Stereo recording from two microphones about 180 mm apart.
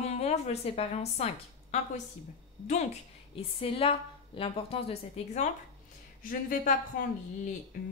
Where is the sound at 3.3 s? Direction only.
30° left (ahead or behind).